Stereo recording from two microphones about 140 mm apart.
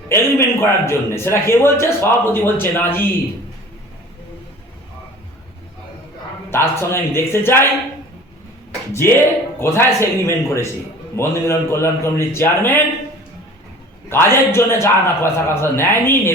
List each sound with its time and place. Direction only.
0.1 s a man's voice: 20° left (ahead or behind)
6.5 s a man's voice: 15° left (ahead or behind)
8.9 s a man's voice: 15° left (ahead or behind)
14.1 s a man's voice: 15° left (ahead or behind)